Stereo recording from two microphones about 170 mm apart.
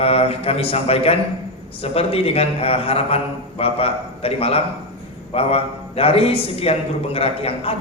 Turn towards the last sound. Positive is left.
turn(degrees=35)  # may be behind; listen again after turning